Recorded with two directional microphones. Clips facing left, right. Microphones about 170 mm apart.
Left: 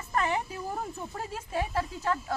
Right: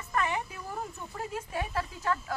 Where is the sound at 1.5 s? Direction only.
30° left (ahead or behind).